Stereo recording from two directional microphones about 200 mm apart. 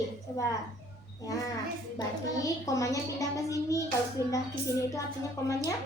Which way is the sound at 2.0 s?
15° left (ahead or behind).